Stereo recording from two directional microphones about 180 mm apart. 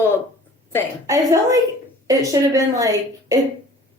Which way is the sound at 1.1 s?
20° right (ahead or behind).